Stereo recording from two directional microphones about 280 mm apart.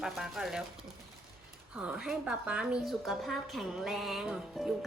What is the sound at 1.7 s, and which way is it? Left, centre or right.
A woman's voice, centre.